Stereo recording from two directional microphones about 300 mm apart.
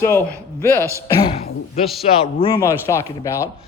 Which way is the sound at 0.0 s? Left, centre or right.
Centre.